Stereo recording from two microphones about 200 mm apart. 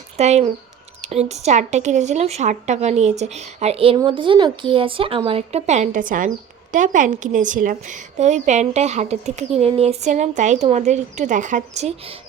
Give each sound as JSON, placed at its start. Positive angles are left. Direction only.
{"t": 0.2, "sound": "speech", "side_deg": -35}